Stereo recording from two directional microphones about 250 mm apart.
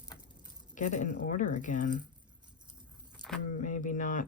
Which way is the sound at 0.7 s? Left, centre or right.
Left.